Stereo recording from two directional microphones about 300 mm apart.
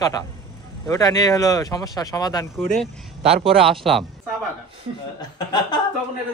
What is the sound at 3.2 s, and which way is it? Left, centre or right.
Speech, centre.